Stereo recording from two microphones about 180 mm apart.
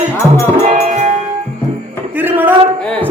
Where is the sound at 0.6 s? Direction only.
40° right (ahead or behind).